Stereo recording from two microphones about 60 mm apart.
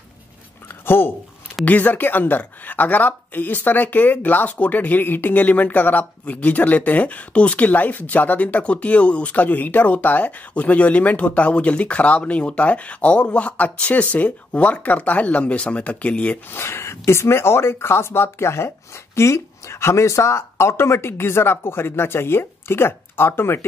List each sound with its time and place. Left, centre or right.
0.7 s a sound: left
1.7 s a woman's voice: left
16.4 s speech: left